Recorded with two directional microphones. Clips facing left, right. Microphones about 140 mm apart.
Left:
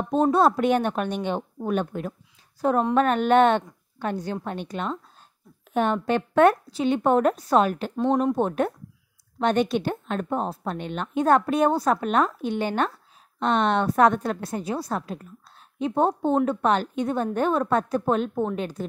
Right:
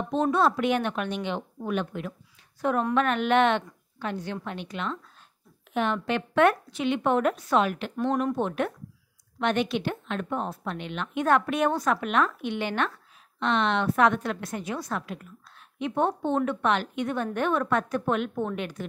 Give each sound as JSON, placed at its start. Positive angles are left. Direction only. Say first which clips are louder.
{"t": 0.1, "sound": "a woman's voice", "louder": "left 4 dB", "side_deg": 40}
{"t": 7.9, "sound": "speech", "louder": "left 4 dB", "side_deg": 25}
{"t": 8.4, "sound": "a woman's voice", "louder": "left 4 dB", "side_deg": 40}